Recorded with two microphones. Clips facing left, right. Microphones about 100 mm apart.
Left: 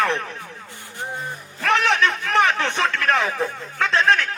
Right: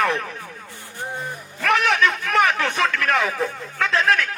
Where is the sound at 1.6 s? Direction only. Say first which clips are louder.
Even; 30° left (ahead or behind).